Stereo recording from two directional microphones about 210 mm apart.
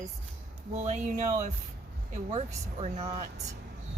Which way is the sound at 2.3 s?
30° right (ahead or behind).